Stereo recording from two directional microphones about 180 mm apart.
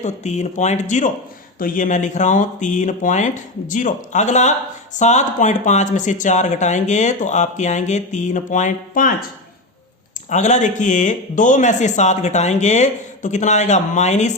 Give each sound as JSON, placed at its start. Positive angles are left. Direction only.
{"t": 0.0, "sound": "speech", "side_deg": 40}
{"t": 10.2, "sound": "speech", "side_deg": 40}